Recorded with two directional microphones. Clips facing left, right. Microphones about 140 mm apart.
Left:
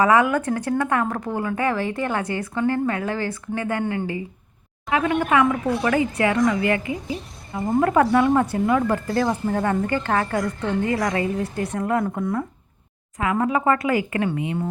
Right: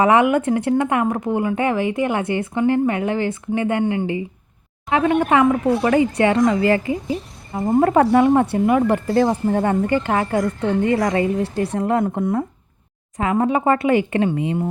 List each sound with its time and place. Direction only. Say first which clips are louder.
0.0 s speech: right 3 dB; 25° right (ahead or behind)